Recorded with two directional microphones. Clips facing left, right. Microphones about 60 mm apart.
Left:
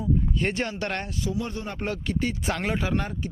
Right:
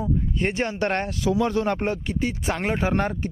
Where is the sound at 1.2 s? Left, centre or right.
Right.